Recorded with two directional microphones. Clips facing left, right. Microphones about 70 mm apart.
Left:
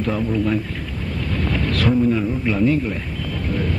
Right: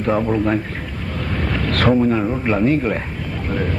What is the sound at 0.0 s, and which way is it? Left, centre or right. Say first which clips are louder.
Speech: right 3 dB; right.